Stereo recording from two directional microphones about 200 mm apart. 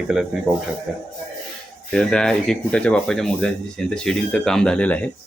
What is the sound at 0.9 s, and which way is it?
Speech, centre (ahead or behind).